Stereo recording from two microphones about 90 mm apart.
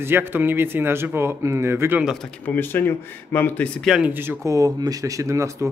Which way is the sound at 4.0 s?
20° right (ahead or behind).